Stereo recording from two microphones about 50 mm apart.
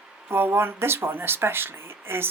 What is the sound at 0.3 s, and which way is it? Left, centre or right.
Speech, right.